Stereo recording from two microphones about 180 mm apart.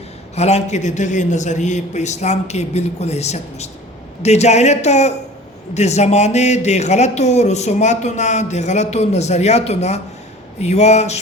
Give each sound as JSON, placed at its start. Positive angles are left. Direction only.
{"t": 0.3, "sound": "speech", "side_deg": 35}